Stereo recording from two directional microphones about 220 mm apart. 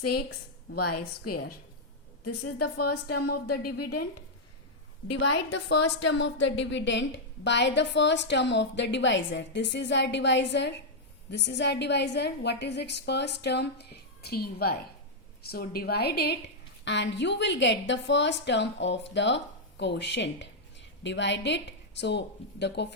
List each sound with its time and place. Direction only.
0.2 s a woman's voice: 45° left (ahead or behind)
0.8 s a woman's voice: 90° left
5.5 s a woman's voice: 55° left (ahead or behind)